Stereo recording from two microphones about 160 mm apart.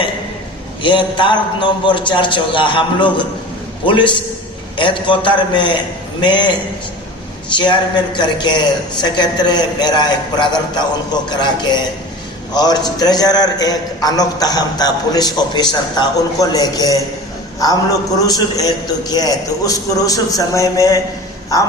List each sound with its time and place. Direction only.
0.8 s a man's voice: 30° left (ahead or behind)
18.2 s a man's voice: 20° left (ahead or behind)